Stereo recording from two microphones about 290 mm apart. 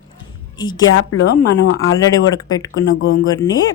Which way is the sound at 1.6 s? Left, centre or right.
Left.